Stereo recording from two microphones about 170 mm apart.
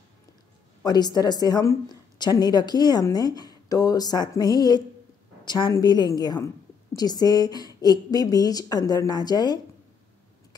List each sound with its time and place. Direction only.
0.8 s a woman's voice: 25° left (ahead or behind)